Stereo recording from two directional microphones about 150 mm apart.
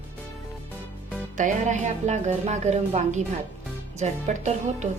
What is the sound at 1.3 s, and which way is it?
A woman's voice, 55° right (ahead or behind).